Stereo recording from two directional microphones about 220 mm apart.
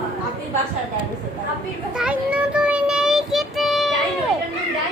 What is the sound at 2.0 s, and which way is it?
Child singing, 5° right (ahead or behind).